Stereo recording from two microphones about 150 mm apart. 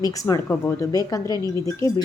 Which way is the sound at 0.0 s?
25° left (ahead or behind).